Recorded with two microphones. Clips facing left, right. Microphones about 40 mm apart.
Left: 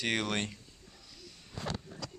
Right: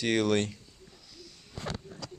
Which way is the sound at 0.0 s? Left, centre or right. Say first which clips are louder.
Right 6 dB; centre.